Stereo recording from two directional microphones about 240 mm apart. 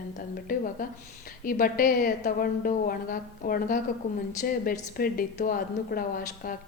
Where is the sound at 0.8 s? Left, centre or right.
Left.